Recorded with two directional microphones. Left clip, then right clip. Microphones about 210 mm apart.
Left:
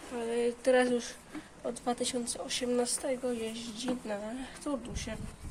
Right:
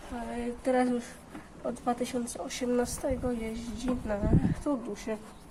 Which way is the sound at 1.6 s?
10° left (ahead or behind).